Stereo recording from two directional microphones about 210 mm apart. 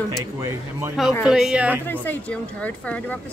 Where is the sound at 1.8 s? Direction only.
10° left (ahead or behind).